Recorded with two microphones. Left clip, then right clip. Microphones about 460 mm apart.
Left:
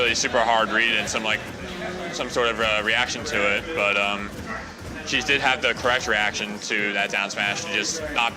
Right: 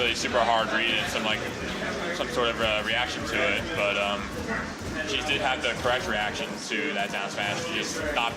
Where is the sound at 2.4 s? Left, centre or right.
Left.